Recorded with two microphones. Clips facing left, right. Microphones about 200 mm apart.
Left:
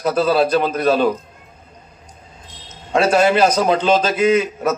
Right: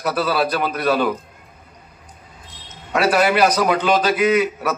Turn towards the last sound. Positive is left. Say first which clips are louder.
# left 1 dB
turn(degrees=25)  # may be behind; listen again after turning